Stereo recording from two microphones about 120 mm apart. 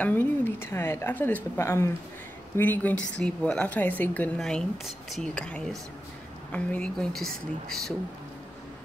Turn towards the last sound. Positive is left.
turn(degrees=0)  # may be behind; listen again after turning